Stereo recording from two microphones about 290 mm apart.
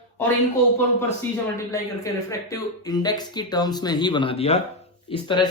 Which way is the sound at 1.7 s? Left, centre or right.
Centre.